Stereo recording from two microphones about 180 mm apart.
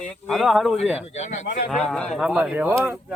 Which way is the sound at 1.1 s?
45° left (ahead or behind).